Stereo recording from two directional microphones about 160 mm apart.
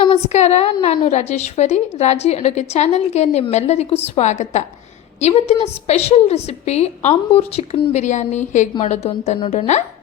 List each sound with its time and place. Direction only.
0.0 s a woman's voice: 40° left (ahead or behind)